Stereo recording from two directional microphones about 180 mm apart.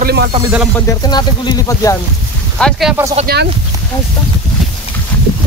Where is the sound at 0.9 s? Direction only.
25° left (ahead or behind).